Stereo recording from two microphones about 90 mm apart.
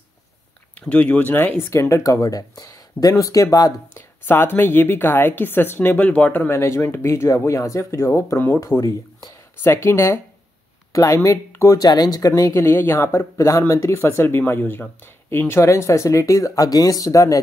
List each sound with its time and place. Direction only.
0.7 s speech: 15° left (ahead or behind)
1.7 s speech: 35° left (ahead or behind)
4.3 s speech: 25° left (ahead or behind)
6.5 s speech: 30° left (ahead or behind)